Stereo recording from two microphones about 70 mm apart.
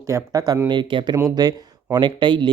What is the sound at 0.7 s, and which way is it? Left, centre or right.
Speech, right.